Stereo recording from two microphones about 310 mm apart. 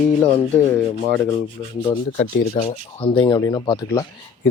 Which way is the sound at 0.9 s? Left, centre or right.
Centre.